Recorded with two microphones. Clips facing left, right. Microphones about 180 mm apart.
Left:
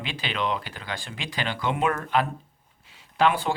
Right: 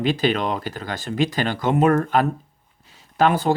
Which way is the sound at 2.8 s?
40° right (ahead or behind).